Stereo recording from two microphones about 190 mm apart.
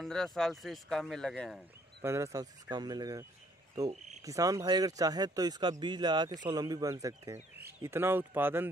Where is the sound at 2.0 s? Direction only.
15° right (ahead or behind).